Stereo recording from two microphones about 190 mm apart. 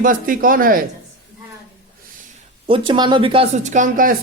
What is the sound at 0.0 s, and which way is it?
Speech, 45° right (ahead or behind).